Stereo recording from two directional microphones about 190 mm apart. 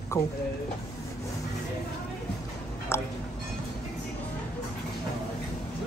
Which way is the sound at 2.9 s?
15° left (ahead or behind).